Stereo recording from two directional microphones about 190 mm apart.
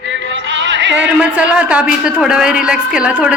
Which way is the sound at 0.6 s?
70° right (ahead or behind).